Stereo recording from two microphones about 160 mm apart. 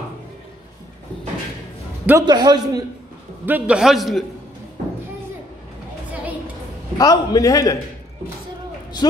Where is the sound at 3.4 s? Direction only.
10° right (ahead or behind).